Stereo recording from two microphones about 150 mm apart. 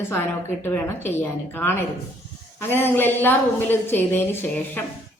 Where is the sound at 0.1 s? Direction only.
15° left (ahead or behind).